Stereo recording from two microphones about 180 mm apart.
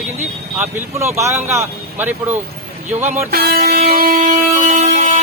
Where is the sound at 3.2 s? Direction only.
60° right (ahead or behind).